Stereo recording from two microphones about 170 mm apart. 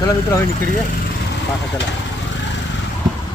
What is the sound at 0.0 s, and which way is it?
Speech, 20° left (ahead or behind).